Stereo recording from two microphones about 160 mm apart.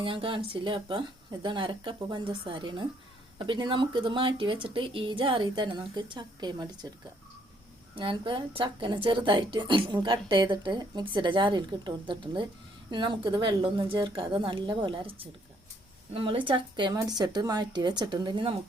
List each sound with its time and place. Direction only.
0.0 s a woman's voice: 35° right (ahead or behind)
7.9 s a woman's voice: 30° right (ahead or behind)